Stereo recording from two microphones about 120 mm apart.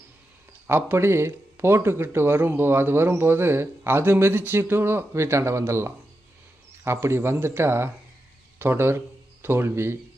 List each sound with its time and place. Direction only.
0.7 s speech: 20° right (ahead or behind)